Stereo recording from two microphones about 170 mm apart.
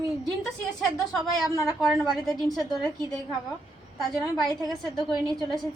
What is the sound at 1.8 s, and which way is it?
A woman's voice, 5° left (ahead or behind).